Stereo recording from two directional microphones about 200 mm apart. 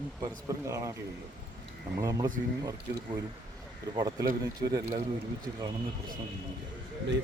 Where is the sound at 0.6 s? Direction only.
15° right (ahead or behind).